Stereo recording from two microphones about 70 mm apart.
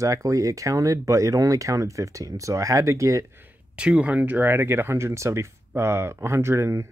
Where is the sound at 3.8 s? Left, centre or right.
Centre; by 6.8 s right.